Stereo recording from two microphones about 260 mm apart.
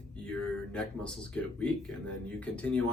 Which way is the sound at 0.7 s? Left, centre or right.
Centre.